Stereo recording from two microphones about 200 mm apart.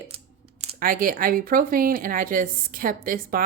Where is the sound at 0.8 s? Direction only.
45° right (ahead or behind).